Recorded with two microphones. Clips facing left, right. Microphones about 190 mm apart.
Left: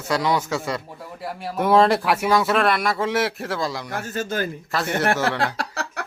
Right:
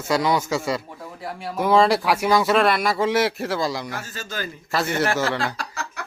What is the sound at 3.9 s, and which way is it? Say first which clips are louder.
Speech: left 6 dB; 55° left (ahead or behind).